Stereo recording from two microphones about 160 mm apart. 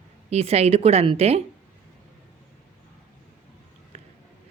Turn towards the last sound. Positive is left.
turn(degrees=-40)  # may be behind; listen again after turning